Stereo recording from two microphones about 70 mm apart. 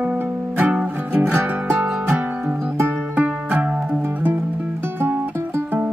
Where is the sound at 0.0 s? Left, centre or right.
Right.